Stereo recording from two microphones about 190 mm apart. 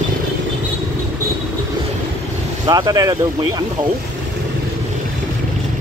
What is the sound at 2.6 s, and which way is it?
Speech, 20° right (ahead or behind).